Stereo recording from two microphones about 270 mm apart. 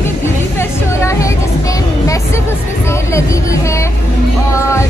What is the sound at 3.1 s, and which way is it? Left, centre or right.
Speech, centre.